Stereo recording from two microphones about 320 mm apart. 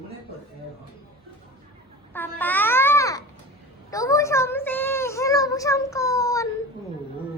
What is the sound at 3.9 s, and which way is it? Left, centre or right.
Child singing, centre.